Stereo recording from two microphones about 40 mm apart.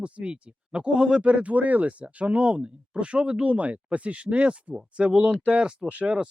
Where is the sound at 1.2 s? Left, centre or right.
Right.